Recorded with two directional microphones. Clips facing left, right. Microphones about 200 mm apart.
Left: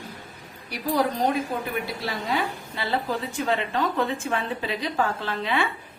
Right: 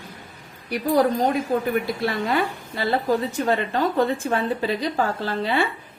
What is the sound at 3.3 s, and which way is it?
A woman's voice, 40° right (ahead or behind).